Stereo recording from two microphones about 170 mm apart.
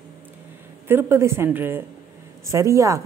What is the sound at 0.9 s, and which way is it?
A woman's voice, 15° right (ahead or behind).